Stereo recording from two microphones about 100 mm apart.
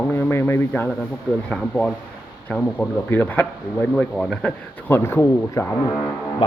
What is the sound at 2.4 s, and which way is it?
Speech, 15° left (ahead or behind).